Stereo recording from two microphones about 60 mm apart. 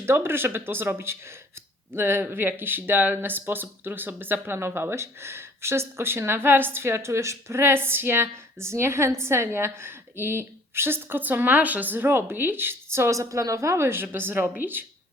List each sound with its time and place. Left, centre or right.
0.0 s speech: right